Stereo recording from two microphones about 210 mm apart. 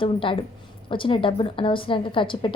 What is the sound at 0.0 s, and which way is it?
A woman's voice, 25° left (ahead or behind).